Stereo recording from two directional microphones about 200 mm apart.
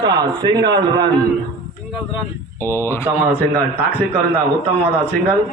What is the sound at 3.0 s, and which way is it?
Speech, 10° right (ahead or behind).